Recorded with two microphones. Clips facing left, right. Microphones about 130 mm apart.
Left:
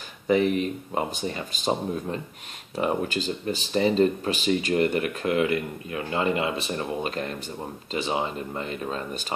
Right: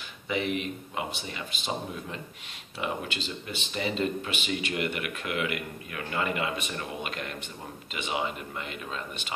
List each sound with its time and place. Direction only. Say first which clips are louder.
0.3 s speech: left 8 dB; 40° left (ahead or behind)